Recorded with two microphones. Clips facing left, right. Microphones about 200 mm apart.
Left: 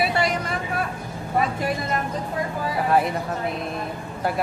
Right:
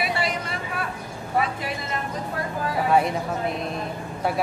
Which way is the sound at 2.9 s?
Centre (ahead or behind).